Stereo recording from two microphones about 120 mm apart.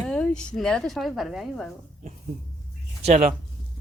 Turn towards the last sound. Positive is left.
turn(degrees=-85)